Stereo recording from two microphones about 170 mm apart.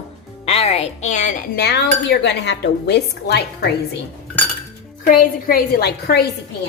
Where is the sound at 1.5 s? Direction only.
80° left.